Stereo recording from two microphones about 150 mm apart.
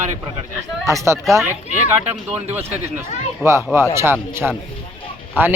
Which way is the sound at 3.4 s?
20° right (ahead or behind).